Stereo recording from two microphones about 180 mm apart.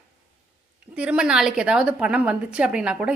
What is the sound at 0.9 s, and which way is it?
A woman's voice, 5° right (ahead or behind).